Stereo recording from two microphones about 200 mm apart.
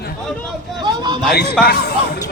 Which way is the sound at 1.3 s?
55° left (ahead or behind).